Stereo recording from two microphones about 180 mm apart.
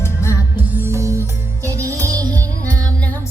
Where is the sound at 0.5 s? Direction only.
10° right (ahead or behind).